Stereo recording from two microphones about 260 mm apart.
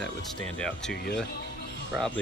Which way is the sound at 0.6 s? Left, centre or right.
Centre.